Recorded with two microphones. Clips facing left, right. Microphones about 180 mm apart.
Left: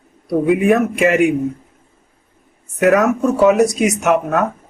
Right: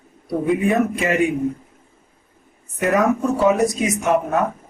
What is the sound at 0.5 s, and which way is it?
Speech, 80° left.